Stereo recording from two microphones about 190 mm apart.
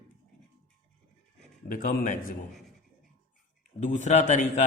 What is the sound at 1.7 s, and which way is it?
Speech, 45° left (ahead or behind).